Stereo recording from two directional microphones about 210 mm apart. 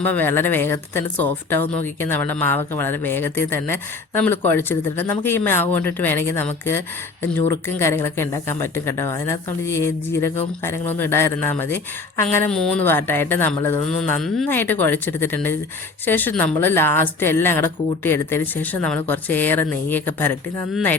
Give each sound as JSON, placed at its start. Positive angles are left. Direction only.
{"t": 0.0, "sound": "speech", "side_deg": 10}